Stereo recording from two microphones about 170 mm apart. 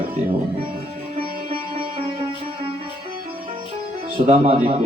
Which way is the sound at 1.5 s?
35° right (ahead or behind).